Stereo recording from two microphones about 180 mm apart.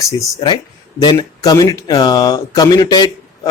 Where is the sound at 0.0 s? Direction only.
25° left (ahead or behind).